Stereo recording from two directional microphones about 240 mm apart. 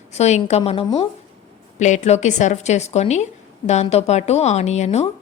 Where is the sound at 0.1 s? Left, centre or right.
Left.